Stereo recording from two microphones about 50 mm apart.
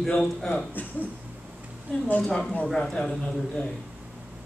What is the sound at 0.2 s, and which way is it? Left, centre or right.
Speech, centre.